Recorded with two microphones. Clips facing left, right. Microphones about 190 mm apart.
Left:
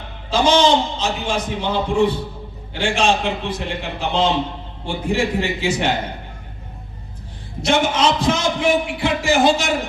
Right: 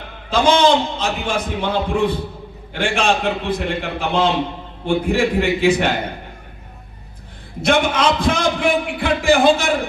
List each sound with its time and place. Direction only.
0.3 s a man's voice: 55° right (ahead or behind)
7.6 s a man's voice: 55° right (ahead or behind)